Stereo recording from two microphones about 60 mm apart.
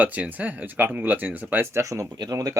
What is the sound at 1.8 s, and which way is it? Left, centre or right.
Speech, right.